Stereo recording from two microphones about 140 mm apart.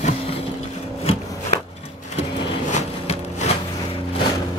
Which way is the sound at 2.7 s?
50° left (ahead or behind).